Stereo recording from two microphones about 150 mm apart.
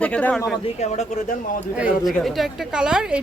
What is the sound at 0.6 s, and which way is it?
Speech, 50° left (ahead or behind).